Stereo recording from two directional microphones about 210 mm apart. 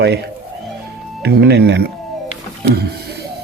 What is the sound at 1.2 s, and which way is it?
Speech, 50° right (ahead or behind).